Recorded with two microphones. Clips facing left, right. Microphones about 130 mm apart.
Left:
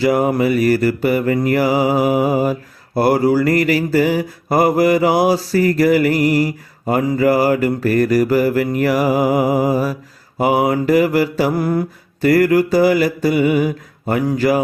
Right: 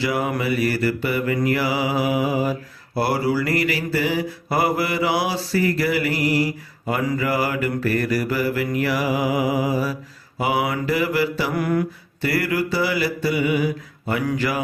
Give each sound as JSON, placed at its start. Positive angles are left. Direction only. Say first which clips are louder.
{"t": 0.0, "sound": "mantra", "louder": "left 8 dB", "side_deg": 40}
{"t": 12.2, "sound": "mantra", "louder": "left 9 dB", "side_deg": 45}
{"t": 14.3, "sound": "speech", "louder": "left 9 dB", "side_deg": 40}